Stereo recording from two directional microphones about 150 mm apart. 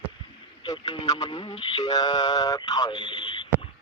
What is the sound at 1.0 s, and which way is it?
A man's voice, 25° left (ahead or behind).